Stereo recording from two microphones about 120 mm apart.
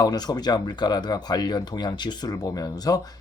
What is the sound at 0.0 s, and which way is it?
Speech, 35° left (ahead or behind).